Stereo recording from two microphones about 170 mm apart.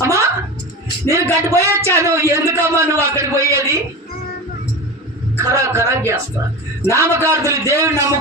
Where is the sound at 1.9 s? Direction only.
15° right (ahead or behind).